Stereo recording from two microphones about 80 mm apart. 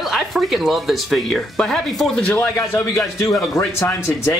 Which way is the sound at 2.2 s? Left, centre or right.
Centre.